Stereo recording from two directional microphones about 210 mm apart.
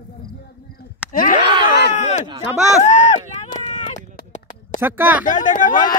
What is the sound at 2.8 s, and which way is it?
Run, 35° left (ahead or behind).